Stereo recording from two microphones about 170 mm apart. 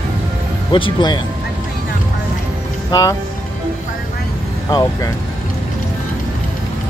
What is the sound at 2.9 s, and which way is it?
Speech, 20° left (ahead or behind).